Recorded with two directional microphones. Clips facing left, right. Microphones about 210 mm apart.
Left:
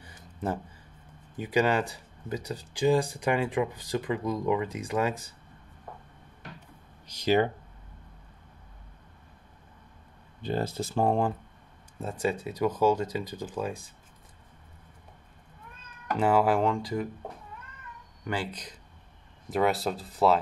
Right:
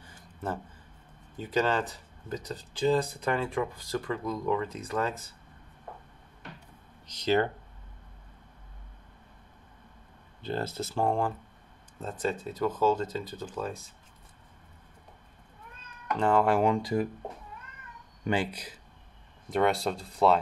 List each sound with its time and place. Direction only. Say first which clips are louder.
0.0 s a sound: left 3 dB; 15° left (ahead or behind)
1.3 s speech: left 2 dB; 15° left (ahead or behind)
7.1 s speech: left 2 dB; 10° left (ahead or behind)
10.4 s speech: left 2 dB; 15° left (ahead or behind)
16.2 s speech: left 1 dB; 5° left (ahead or behind)
16.6 s speech: right 2 dB; 20° right (ahead or behind)
18.2 s speech: right 4 dB; 20° right (ahead or behind)
18.5 s speech: left 1 dB; 10° right (ahead or behind)